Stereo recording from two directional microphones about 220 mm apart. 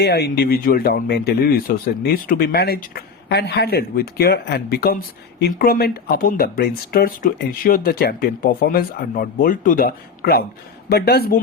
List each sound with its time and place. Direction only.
0.0 s a man's voice: 45° left (ahead or behind)